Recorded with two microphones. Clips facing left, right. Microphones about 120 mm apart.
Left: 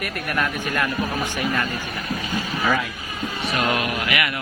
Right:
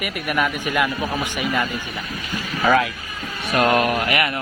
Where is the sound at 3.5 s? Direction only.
45° right (ahead or behind).